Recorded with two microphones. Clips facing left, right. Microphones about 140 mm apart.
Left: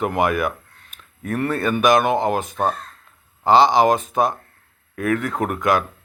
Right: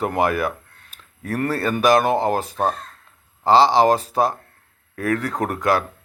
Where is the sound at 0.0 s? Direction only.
35° right (ahead or behind).